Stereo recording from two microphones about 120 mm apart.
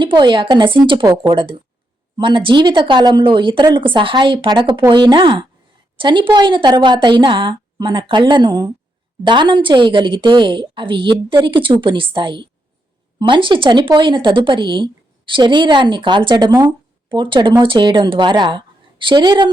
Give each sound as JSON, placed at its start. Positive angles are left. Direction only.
{"t": 0.0, "sound": "a woman's voice", "side_deg": -40}